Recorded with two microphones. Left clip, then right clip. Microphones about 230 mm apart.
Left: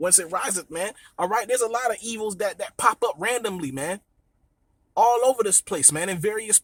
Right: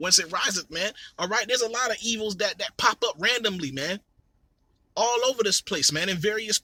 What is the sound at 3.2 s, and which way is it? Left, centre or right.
A man's voice, centre.